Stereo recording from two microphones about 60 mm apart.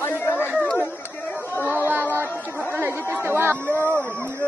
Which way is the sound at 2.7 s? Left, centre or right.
Right.